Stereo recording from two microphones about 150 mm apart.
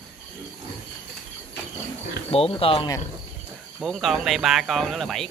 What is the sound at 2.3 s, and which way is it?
Speech, 40° left (ahead or behind).